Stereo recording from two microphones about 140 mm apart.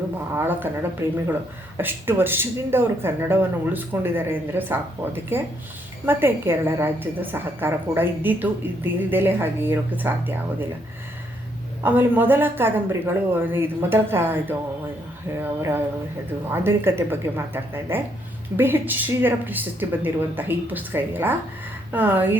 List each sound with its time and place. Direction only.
0.3 s a woman's voice: 15° right (ahead or behind)
11.8 s a woman's voice: 15° right (ahead or behind)